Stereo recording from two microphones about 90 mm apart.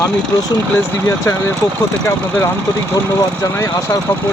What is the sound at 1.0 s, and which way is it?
Speech, 30° left (ahead or behind).